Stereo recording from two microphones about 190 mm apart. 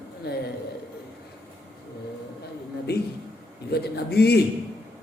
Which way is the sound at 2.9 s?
60° left (ahead or behind).